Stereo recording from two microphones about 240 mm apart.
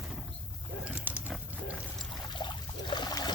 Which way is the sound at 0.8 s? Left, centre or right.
Centre.